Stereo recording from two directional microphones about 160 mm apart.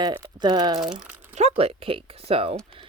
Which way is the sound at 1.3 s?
40° right (ahead or behind).